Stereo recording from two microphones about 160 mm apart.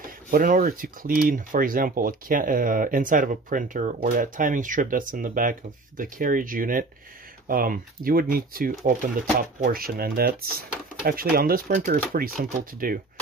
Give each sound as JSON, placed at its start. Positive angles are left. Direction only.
{"t": 0.3, "sound": "speech", "side_deg": -55}